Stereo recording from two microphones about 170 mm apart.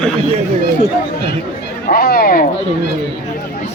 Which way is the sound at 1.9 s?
65° left (ahead or behind).